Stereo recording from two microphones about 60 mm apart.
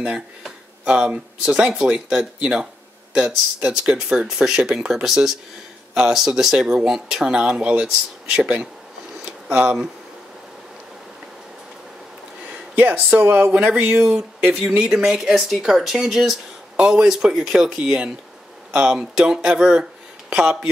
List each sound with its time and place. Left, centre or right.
0.0 s speech: centre
9.2 s a sound: right
12.7 s speech: right; by 20.5 s centre